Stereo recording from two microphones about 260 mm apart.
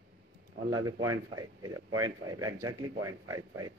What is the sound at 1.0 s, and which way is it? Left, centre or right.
Speech, centre.